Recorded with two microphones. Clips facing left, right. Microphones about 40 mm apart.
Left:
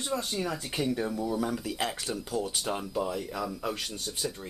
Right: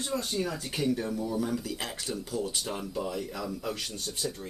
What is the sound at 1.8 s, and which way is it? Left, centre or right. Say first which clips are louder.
Speech: left 2 dB; centre.